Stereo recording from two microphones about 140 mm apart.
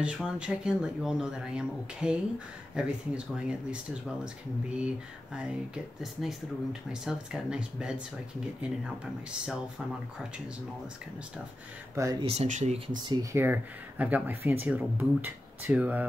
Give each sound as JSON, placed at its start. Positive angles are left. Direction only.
{"t": 0.0, "sound": "speech", "side_deg": -5}
{"t": 11.9, "sound": "speech", "side_deg": -20}
{"t": 12.2, "sound": "speech", "side_deg": -45}
{"t": 12.4, "sound": "speech", "side_deg": -60}
{"t": 13.0, "sound": "speech", "side_deg": -25}